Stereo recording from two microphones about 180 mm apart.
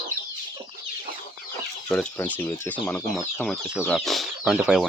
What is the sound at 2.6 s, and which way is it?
Chicken, 10° left (ahead or behind).